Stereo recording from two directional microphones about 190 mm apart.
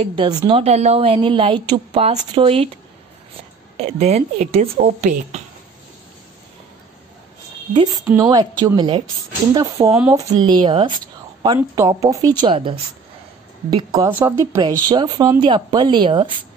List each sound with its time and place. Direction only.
0.0 s a woman's voice: 25° right (ahead or behind)
3.7 s speech: 35° right (ahead or behind)
8.2 s a woman's voice: 20° right (ahead or behind)
10.3 s a woman's voice: 20° right (ahead or behind)
14.0 s a woman's voice: 10° right (ahead or behind)